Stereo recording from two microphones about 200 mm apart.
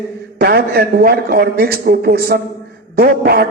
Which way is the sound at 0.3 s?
50° right (ahead or behind).